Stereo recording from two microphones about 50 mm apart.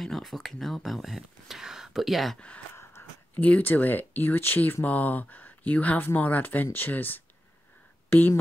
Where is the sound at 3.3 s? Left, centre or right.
Left.